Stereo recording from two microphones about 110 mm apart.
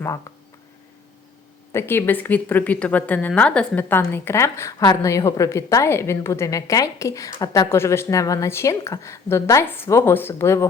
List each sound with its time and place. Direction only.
1.7 s a woman's voice: 20° left (ahead or behind); by 7.7 s 40° left (ahead or behind)
7.7 s a woman's voice: 25° left (ahead or behind)